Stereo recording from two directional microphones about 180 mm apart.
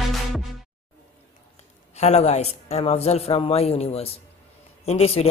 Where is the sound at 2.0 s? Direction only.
40° left (ahead or behind).